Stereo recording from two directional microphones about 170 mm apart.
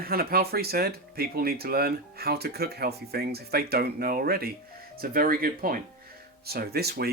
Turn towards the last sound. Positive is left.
turn(degrees=-70)  # may be behind; listen again after turning